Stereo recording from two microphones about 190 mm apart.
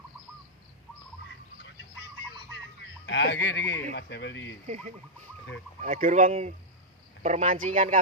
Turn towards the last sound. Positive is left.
turn(degrees=-40)  # may be behind; listen again after turning